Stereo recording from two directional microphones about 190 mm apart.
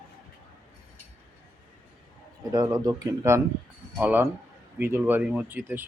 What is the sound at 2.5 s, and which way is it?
A man's voice, 20° right (ahead or behind).